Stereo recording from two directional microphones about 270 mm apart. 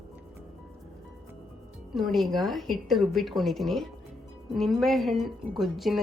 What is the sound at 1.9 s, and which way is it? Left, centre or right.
Speech, centre.